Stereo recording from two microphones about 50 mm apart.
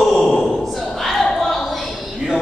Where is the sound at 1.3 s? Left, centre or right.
Centre.